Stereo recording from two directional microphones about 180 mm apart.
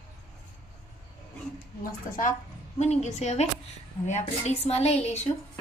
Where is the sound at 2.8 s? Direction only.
40° left (ahead or behind).